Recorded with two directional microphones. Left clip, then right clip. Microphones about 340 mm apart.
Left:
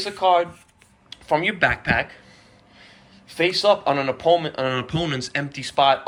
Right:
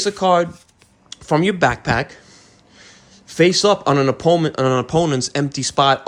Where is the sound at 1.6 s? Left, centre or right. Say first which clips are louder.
Right 3 dB; centre.